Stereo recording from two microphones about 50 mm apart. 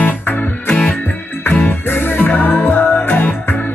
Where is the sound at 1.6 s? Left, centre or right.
Left.